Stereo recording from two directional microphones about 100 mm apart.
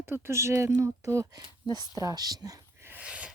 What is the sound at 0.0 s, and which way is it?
Speech, 25° right (ahead or behind).